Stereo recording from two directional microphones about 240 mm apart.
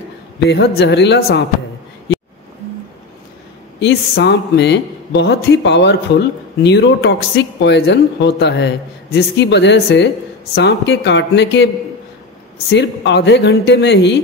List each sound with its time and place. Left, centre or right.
0.5 s speech: left
3.8 s speech: left
12.7 s speech: left